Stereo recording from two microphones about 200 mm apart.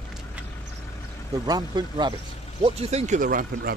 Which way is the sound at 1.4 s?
20° right (ahead or behind).